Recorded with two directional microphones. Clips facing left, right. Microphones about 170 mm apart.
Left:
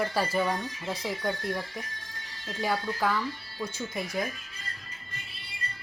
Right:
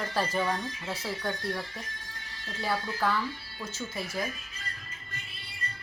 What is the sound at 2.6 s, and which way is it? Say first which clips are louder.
Speech: left 2 dB; 15° left (ahead or behind).